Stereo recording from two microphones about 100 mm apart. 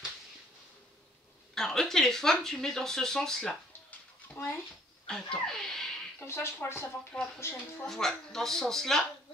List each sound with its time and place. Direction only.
1.5 s speech: 5° left (ahead or behind)
6.1 s speech: 25° left (ahead or behind)
7.8 s speech: 5° left (ahead or behind)